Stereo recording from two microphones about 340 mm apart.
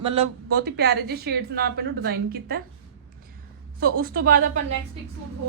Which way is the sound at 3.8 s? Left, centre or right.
Right.